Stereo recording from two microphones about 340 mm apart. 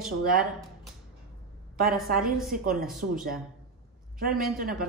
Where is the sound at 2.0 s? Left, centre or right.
Right.